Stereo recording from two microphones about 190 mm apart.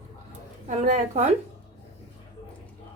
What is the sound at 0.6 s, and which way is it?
Speech, 40° right (ahead or behind).